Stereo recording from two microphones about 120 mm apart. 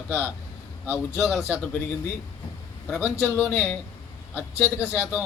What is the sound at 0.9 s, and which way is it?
Speech, 20° left (ahead or behind).